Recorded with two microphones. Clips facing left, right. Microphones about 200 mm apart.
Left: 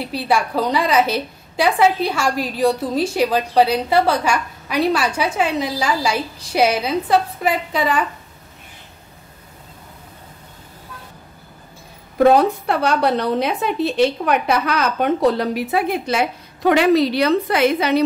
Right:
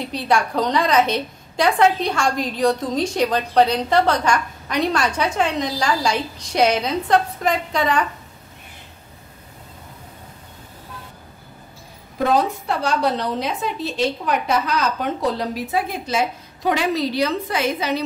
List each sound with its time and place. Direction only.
0.0 s a woman's voice: 5° left (ahead or behind)
12.3 s a woman's voice: 60° left (ahead or behind)